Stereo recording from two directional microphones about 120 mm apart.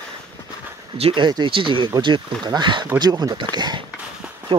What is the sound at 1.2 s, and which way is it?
Speech, 40° right (ahead or behind).